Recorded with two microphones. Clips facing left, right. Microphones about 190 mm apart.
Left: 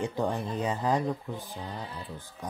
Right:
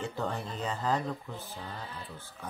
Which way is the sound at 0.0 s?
15° left (ahead or behind).